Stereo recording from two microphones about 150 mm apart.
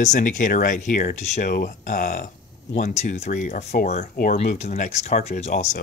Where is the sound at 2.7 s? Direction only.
50° left (ahead or behind).